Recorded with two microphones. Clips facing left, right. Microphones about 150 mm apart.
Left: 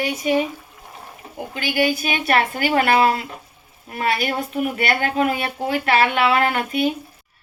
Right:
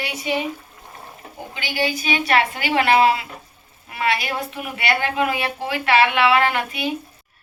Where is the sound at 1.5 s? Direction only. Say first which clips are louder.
Left 4 dB; 50° left (ahead or behind).